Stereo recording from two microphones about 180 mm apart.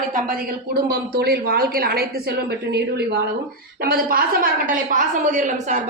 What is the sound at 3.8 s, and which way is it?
A woman's voice, 55° right (ahead or behind).